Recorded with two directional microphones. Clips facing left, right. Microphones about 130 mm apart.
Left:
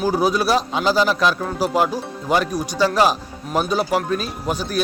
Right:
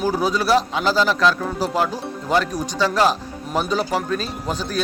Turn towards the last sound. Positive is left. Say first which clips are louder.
# left 2 dB
turn(degrees=10)  # may be behind; listen again after turning